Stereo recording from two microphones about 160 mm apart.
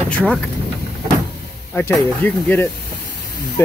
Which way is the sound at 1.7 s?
15° left (ahead or behind).